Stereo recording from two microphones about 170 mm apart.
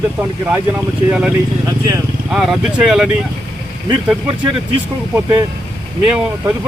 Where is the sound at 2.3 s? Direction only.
5° right (ahead or behind).